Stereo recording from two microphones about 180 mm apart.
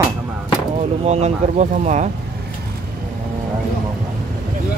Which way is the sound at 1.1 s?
35° right (ahead or behind).